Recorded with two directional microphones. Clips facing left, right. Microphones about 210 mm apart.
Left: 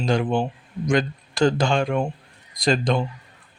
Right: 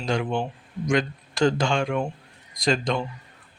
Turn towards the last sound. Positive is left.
turn(degrees=35)  # may be behind; listen again after turning